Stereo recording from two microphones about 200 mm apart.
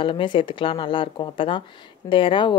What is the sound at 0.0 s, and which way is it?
Speech, 25° left (ahead or behind).